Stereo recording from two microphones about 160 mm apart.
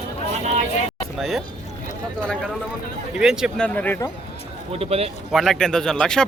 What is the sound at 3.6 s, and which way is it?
Speech, 10° left (ahead or behind).